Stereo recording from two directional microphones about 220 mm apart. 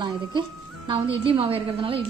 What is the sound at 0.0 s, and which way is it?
Speech, 20° right (ahead or behind).